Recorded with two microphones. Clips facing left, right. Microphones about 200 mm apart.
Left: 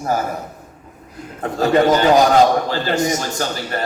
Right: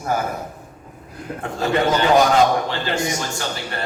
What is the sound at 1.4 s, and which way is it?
A man's voice, 40° left (ahead or behind).